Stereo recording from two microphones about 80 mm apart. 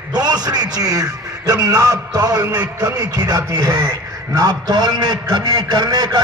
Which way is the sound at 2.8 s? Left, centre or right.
Right.